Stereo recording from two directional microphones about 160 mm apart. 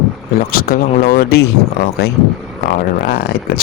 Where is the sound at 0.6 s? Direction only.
70° left (ahead or behind).